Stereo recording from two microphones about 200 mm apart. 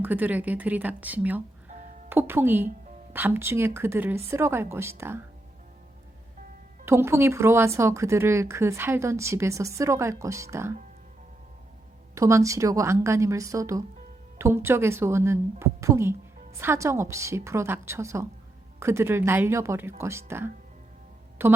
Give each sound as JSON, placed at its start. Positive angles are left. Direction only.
{"t": 0.0, "sound": "speech", "side_deg": -10}
{"t": 6.8, "sound": "speech", "side_deg": -10}
{"t": 12.1, "sound": "speech", "side_deg": -15}